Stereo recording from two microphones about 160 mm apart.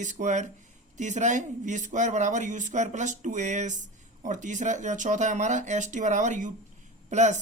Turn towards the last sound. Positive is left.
turn(degrees=-50)  # may be behind; listen again after turning